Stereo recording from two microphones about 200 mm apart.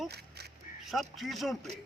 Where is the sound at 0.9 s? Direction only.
Centre (ahead or behind).